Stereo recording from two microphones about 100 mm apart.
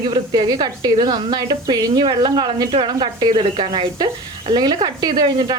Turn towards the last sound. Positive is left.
turn(degrees=-45)  # may be behind; listen again after turning